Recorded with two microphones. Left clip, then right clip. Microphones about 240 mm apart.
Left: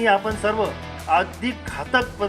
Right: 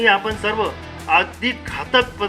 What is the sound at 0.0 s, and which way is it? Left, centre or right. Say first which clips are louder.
Speech: right 2 dB; left.